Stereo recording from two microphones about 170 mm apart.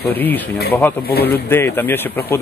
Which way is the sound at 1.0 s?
65° left (ahead or behind).